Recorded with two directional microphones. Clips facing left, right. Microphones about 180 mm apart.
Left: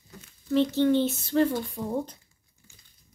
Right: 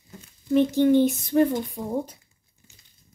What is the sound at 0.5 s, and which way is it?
Speech, 15° right (ahead or behind).